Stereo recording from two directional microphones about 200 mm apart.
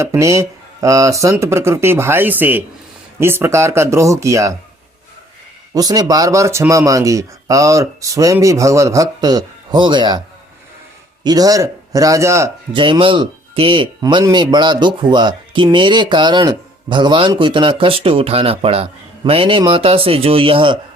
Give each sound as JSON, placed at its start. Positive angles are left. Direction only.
{"t": 0.0, "sound": "speech", "side_deg": -15}
{"t": 5.7, "sound": "speech", "side_deg": -20}